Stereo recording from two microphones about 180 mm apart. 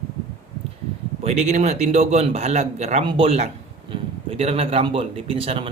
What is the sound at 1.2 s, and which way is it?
A man's voice, 40° right (ahead or behind).